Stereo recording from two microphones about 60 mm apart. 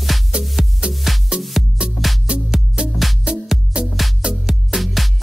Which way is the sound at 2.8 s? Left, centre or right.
Centre.